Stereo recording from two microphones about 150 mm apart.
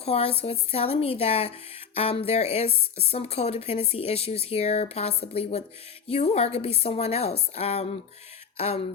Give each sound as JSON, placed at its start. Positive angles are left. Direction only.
{"t": 0.0, "sound": "speech", "side_deg": 40}